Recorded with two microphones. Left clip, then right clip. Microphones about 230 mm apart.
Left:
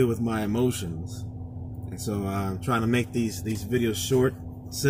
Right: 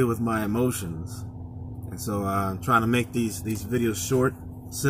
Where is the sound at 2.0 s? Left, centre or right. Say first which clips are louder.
Right 4 dB; centre.